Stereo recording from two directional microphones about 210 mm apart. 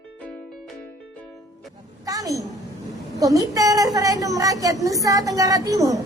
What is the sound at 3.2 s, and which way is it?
A woman's voice, 15° right (ahead or behind).